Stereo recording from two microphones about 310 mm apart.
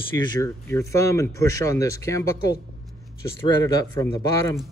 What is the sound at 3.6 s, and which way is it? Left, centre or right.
Speech, centre.